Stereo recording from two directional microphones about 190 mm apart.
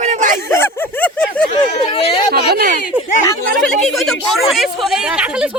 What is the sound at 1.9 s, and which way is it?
Speech, 30° left (ahead or behind).